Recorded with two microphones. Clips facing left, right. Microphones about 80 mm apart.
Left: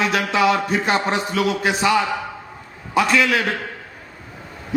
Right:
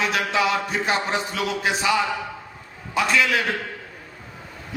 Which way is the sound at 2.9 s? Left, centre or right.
Left.